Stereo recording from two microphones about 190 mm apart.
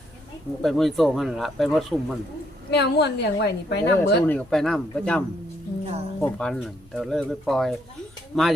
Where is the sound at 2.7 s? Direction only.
60° left (ahead or behind).